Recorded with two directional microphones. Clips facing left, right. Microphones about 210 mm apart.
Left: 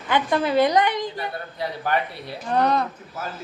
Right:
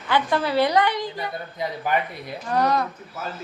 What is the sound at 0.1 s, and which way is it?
A woman's voice, 20° left (ahead or behind).